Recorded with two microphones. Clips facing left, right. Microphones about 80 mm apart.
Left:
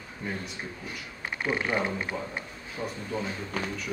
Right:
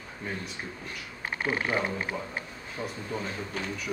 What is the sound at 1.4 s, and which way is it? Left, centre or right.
Speech, centre.